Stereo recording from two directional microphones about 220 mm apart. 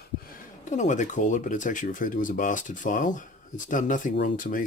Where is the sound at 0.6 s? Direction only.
35° left (ahead or behind).